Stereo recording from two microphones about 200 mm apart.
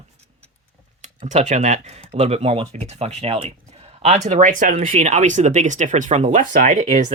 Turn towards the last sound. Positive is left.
turn(degrees=-35)  # may be behind; listen again after turning